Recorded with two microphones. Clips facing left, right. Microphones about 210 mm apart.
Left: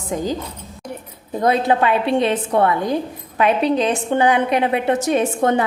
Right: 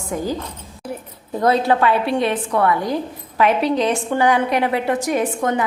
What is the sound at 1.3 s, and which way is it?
A woman's voice, 20° left (ahead or behind).